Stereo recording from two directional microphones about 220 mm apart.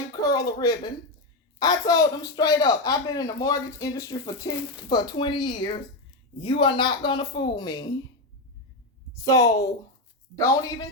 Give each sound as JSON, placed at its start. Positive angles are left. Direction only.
{"t": 0.1, "sound": "a sound", "side_deg": 15}
{"t": 1.5, "sound": "a woman's voice", "side_deg": 20}
{"t": 9.2, "sound": "speech", "side_deg": 15}